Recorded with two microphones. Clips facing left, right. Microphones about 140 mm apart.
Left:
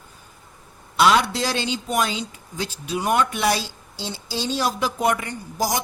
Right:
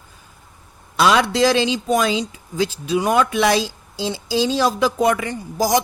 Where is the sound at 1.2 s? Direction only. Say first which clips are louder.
Right 7 dB; 90° right.